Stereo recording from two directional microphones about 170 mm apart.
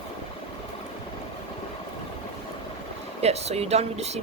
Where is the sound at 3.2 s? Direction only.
40° right (ahead or behind).